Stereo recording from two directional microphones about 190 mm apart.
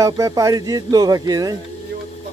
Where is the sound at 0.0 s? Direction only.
15° right (ahead or behind).